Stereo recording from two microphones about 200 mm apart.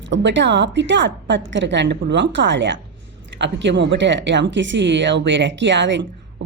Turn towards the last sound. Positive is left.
turn(degrees=-65)  # may be behind; listen again after turning